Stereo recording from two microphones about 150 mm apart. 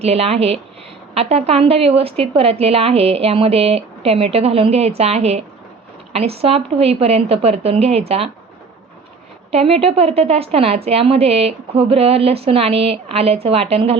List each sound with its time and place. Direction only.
0.0 s a woman's voice: 45° right (ahead or behind)
9.5 s a woman's voice: 40° right (ahead or behind)